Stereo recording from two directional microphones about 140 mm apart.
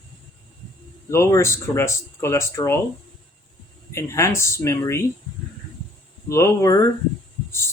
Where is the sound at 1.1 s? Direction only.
20° left (ahead or behind).